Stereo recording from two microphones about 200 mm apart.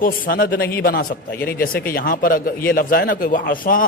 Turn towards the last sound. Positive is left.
turn(degrees=45)  # may be behind; listen again after turning